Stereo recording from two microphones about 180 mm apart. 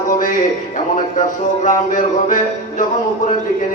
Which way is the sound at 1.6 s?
45° left (ahead or behind).